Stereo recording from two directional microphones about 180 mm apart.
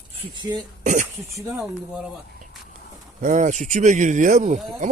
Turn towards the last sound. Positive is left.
turn(degrees=-45)  # may be behind; listen again after turning